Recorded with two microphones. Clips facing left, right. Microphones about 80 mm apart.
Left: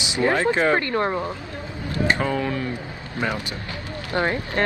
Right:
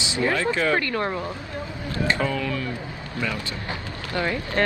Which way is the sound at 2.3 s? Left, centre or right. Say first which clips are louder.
Left 3 dB; left.